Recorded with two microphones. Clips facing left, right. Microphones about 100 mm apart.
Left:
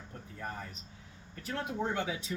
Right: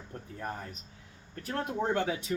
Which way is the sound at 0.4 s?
50° right (ahead or behind).